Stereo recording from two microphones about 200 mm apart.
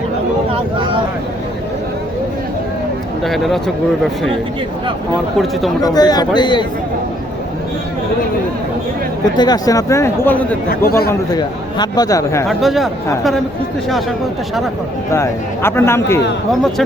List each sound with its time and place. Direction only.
3.2 s speech: centre (ahead or behind)
5.8 s a man's voice: 20° left (ahead or behind)
9.4 s speech: 20° left (ahead or behind)
10.7 s speech: 50° left (ahead or behind)
11.1 s speech: 20° left (ahead or behind)
12.5 s speech: centre (ahead or behind)
15.1 s speech: 15° left (ahead or behind)